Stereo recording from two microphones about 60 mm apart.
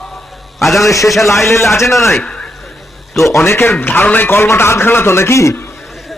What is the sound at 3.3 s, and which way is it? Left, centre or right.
A man's voice, left.